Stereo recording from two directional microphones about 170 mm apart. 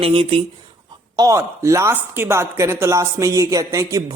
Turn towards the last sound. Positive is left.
turn(degrees=-20)  # may be behind; listen again after turning